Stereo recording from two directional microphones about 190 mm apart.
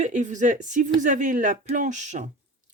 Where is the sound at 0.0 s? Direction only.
40° right (ahead or behind).